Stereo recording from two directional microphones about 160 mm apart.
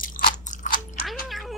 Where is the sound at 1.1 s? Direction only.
Centre (ahead or behind).